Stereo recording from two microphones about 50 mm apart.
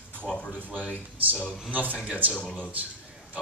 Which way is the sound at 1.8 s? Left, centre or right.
Left.